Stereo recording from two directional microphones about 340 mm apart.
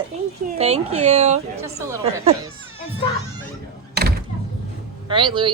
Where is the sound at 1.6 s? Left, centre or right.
Centre.